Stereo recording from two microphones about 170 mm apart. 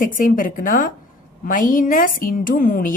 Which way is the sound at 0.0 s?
50° left (ahead or behind).